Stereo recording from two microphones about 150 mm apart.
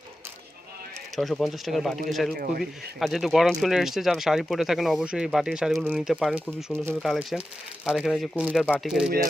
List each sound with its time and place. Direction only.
1.1 s speech: centre (ahead or behind)
2.3 s speech: 90° right
3.0 s speech: centre (ahead or behind)